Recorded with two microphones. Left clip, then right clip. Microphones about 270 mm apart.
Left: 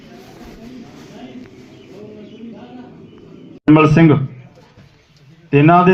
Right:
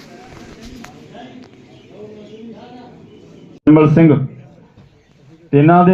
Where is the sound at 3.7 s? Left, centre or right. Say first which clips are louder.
Right 1 dB; left.